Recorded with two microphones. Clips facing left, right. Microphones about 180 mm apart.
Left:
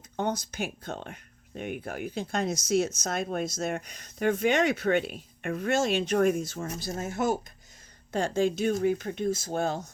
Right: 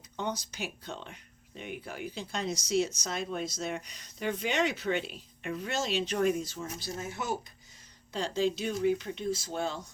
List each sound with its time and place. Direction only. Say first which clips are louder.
0.2 s speech: left 5 dB; 50° left (ahead or behind)